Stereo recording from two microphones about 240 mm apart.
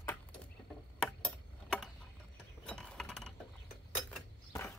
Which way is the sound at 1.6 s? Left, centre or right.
Centre.